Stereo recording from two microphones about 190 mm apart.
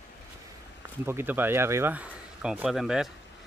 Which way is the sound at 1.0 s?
10° right (ahead or behind).